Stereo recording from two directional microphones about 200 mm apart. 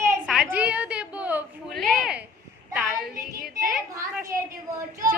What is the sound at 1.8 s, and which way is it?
Speech, centre (ahead or behind).